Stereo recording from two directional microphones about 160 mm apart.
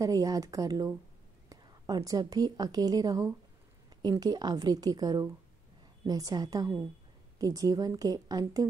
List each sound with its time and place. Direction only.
0.0 s a woman's voice: 20° right (ahead or behind)